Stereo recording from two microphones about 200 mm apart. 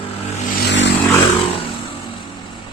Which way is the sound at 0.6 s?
60° left (ahead or behind).